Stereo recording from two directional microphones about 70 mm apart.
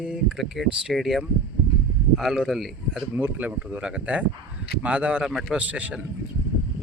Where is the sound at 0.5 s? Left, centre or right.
Centre.